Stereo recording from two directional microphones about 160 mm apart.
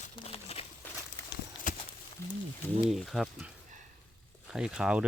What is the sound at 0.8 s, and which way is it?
Walk, 10° left (ahead or behind).